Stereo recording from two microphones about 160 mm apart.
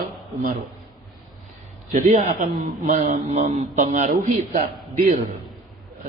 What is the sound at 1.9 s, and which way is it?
A man's voice, 50° right (ahead or behind).